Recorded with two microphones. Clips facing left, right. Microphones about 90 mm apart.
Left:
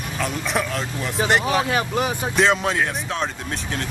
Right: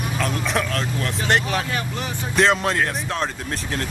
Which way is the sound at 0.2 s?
5° left (ahead or behind).